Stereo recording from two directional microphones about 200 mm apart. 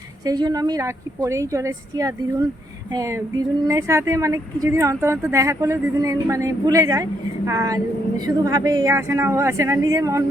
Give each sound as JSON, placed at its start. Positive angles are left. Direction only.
{"t": 0.3, "sound": "speech", "side_deg": -20}